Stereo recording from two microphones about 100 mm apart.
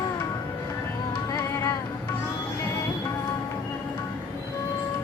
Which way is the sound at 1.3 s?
35° left (ahead or behind).